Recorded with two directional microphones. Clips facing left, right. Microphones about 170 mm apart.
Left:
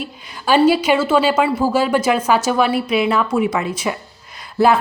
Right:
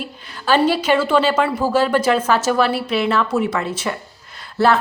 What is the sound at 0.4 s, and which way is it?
A woman's voice, 10° left (ahead or behind).